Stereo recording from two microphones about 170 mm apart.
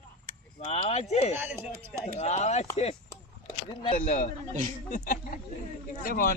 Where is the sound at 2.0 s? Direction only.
40° left (ahead or behind).